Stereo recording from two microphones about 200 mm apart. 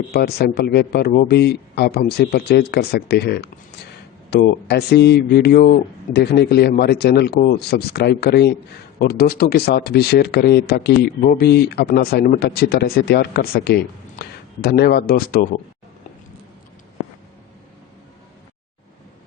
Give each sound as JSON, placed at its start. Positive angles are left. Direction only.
{"t": 0.1, "sound": "speech", "side_deg": 50}